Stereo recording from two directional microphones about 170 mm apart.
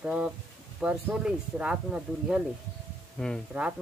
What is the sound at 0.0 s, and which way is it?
Speech, 5° right (ahead or behind).